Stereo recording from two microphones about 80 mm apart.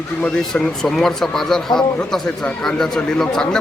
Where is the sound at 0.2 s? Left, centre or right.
Centre.